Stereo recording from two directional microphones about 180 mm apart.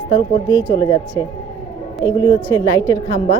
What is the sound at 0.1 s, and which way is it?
Speech, 25° left (ahead or behind).